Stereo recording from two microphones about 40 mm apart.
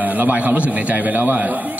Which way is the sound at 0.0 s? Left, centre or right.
Right.